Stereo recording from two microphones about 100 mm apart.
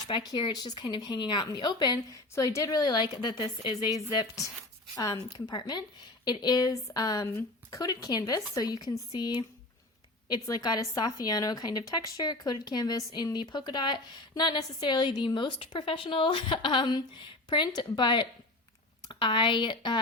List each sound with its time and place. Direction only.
0.1 s speech: 50° left (ahead or behind)
2.3 s speech: 30° left (ahead or behind); by 20.0 s 50° left (ahead or behind)